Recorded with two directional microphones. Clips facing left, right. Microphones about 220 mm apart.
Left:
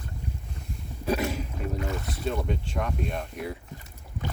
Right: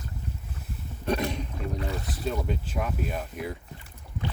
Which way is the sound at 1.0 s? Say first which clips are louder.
Left 1 dB; 5° left (ahead or behind).